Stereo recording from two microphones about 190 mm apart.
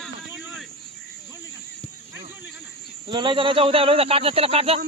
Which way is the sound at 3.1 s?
25° right (ahead or behind).